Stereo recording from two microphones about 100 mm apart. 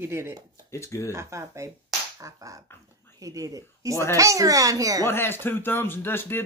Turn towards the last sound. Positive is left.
turn(degrees=20)  # may be behind; listen again after turning